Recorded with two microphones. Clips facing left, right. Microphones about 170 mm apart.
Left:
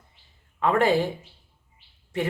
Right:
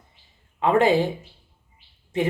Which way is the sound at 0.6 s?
20° right (ahead or behind).